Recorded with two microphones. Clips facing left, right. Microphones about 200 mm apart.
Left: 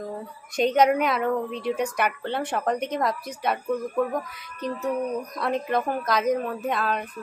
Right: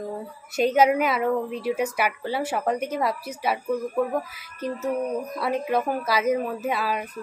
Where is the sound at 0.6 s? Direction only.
5° right (ahead or behind).